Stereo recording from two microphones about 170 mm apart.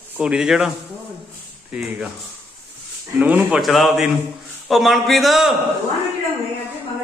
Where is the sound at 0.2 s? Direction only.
5° right (ahead or behind).